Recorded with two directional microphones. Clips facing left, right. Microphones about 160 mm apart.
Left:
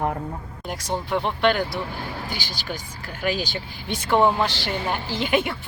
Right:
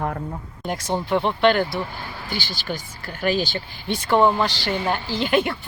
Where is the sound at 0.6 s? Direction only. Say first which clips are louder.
Right 3 dB; centre (ahead or behind).